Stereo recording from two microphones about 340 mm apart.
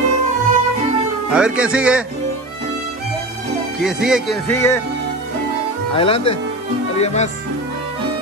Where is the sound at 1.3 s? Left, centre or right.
Centre.